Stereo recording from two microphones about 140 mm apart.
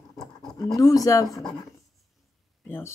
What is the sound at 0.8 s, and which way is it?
Speech, 25° left (ahead or behind).